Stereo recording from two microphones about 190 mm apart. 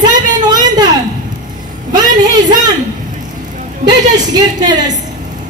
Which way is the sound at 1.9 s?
20° right (ahead or behind).